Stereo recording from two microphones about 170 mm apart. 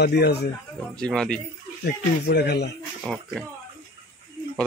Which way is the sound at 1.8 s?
65° left (ahead or behind).